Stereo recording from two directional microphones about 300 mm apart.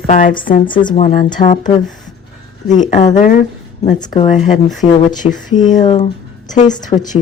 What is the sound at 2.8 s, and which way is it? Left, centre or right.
Speech, left.